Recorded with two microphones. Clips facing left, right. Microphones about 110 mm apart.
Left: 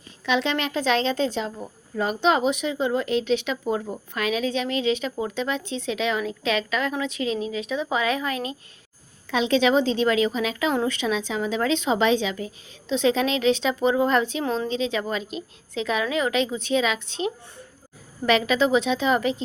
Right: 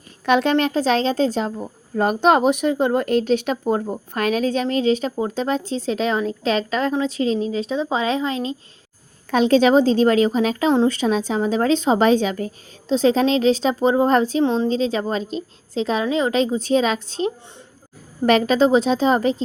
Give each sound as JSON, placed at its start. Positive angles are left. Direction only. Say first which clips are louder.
{"t": 0.3, "sound": "a woman's voice", "louder": "right 7 dB", "side_deg": -45}
{"t": 9.3, "sound": "a woman's voice", "louder": "right 6 dB", "side_deg": -45}